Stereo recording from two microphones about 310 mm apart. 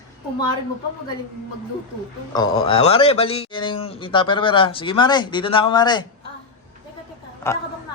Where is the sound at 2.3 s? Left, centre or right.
Centre.